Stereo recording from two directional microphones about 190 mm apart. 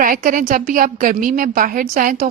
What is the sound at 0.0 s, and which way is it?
A woman's voice, 45° right (ahead or behind).